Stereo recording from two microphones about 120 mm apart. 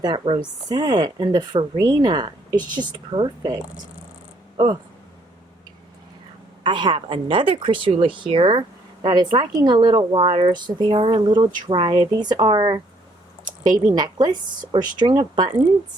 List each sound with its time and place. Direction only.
0.0 s speech: 40° right (ahead or behind)
6.6 s speech: 40° right (ahead or behind)
14.0 s speech: 35° right (ahead or behind)